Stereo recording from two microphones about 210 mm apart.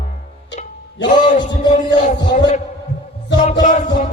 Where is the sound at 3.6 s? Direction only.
35° left (ahead or behind).